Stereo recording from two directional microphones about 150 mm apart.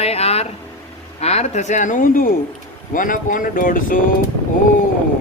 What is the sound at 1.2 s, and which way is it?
Speech, 45° left (ahead or behind).